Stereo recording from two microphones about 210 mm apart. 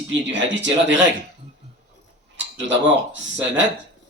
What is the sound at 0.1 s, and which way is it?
Speech, 60° right (ahead or behind).